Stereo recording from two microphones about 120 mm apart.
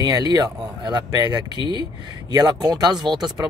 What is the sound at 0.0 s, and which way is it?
Speech, 35° right (ahead or behind).